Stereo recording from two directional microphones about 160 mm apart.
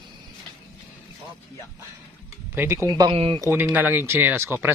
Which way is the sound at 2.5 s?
15° right (ahead or behind).